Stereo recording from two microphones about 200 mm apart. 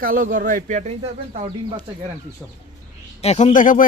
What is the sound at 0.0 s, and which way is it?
Speech, 45° right (ahead or behind).